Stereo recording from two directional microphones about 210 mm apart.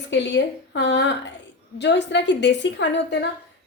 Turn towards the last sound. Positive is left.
turn(degrees=55)  # may be behind; listen again after turning